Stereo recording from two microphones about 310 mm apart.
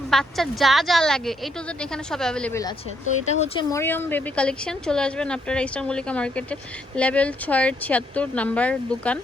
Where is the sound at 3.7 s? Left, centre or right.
Centre.